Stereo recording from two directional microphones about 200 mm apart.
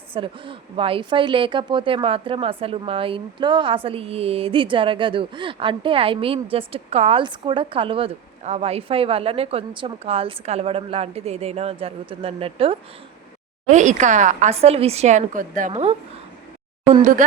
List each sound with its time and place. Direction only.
0.1 s a woman's voice: 25° right (ahead or behind)